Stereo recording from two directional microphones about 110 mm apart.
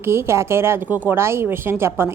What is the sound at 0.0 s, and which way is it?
A woman's voice, 20° right (ahead or behind).